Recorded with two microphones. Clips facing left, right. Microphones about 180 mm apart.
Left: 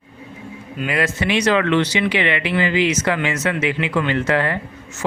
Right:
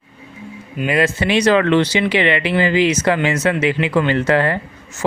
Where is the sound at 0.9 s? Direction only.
25° right (ahead or behind).